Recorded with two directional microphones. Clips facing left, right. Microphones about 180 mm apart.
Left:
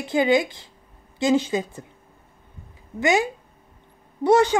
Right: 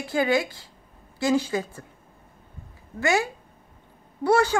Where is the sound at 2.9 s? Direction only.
20° left (ahead or behind).